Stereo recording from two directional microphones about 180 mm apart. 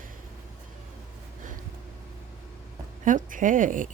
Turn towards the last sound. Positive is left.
turn(degrees=-45)  # may be behind; listen again after turning